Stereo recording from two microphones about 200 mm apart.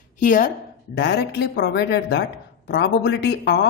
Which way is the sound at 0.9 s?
55° left (ahead or behind).